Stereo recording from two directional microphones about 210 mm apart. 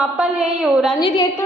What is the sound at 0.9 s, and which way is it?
Speech, 20° left (ahead or behind).